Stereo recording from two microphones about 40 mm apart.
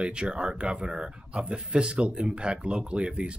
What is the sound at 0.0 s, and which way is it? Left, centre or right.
Speech, right.